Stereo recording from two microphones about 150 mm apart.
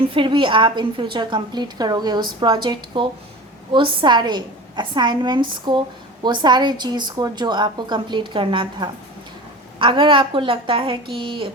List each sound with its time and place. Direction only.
0.1 s a woman's voice: 35° right (ahead or behind)